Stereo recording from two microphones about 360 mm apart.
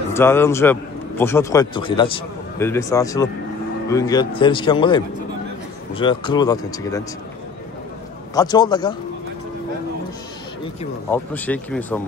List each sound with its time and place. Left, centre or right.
0.1 s a man's voice: centre
8.4 s a man's voice: centre
11.1 s speech: centre